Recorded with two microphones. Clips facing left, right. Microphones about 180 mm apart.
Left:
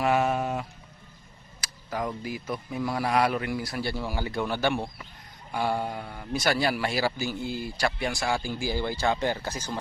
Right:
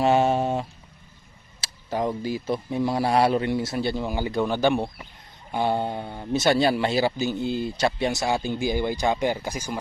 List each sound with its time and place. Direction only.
0.0 s a man's voice: 25° right (ahead or behind); by 9.8 s 10° right (ahead or behind)